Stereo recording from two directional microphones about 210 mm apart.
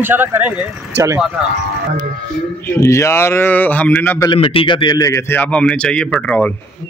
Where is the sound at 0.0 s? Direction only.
10° right (ahead or behind).